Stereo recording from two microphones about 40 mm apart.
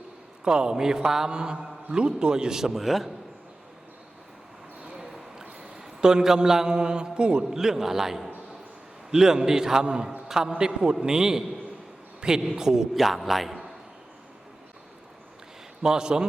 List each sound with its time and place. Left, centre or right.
0.4 s a man's voice: centre
4.9 s a sound: centre
7.5 s a man's voice: centre
15.8 s speech: centre